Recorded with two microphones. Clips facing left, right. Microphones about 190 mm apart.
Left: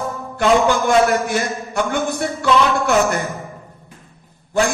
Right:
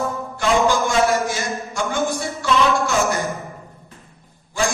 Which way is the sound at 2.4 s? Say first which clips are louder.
Left 4 dB; 60° left (ahead or behind).